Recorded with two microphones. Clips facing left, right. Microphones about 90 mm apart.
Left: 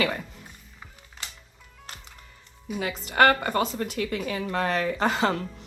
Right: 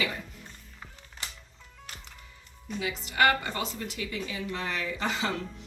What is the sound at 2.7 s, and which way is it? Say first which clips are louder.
Speech: left 5 dB; 50° left (ahead or behind).